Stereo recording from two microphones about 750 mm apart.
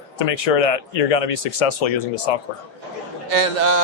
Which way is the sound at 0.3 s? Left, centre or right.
Left.